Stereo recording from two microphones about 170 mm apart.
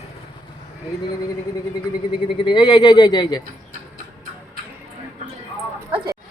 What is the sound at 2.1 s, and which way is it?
Speech, 30° left (ahead or behind).